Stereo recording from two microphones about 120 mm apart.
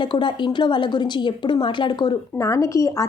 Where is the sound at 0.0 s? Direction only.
40° left (ahead or behind).